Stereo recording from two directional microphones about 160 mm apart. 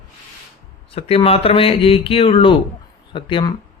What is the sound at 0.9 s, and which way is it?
Speech, 35° left (ahead or behind).